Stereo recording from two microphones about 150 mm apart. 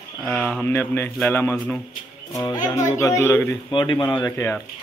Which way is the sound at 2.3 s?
25° left (ahead or behind).